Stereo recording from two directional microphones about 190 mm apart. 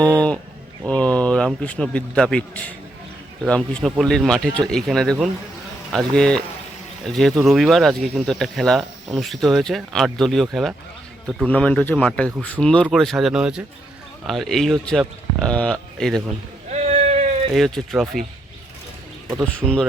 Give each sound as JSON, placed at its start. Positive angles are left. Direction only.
{"t": 0.0, "sound": "speech", "side_deg": 5}
{"t": 16.6, "sound": "a sound", "side_deg": -35}
{"t": 17.5, "sound": "speech", "side_deg": 0}
{"t": 19.5, "sound": "speech", "side_deg": 5}